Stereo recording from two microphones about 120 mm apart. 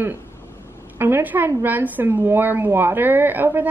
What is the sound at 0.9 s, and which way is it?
A woman's voice, 20° right (ahead or behind).